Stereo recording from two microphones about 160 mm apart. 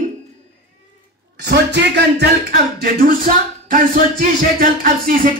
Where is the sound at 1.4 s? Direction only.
90° right.